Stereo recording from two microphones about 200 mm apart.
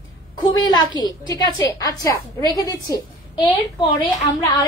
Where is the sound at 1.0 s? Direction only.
20° left (ahead or behind).